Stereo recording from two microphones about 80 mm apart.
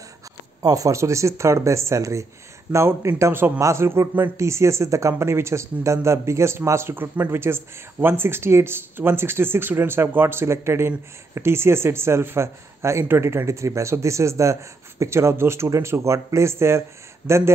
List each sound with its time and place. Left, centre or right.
0.6 s speech: right
17.2 s speech: centre